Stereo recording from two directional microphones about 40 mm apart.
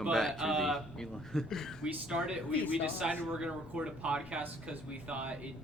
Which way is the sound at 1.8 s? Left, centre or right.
Centre.